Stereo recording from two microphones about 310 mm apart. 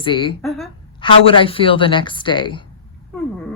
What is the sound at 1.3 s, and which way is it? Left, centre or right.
A woman's voice, centre.